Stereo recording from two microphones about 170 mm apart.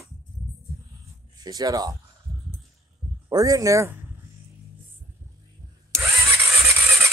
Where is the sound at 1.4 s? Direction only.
25° right (ahead or behind).